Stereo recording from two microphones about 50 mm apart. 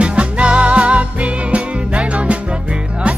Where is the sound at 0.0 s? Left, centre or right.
Right.